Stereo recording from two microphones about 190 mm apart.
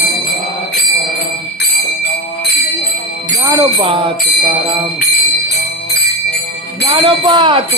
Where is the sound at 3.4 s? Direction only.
15° right (ahead or behind).